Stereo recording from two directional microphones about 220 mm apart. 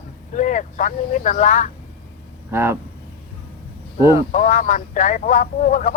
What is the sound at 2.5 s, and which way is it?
Speech, 10° right (ahead or behind).